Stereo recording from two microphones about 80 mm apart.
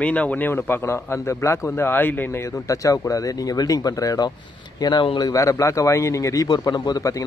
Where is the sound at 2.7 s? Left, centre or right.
Left.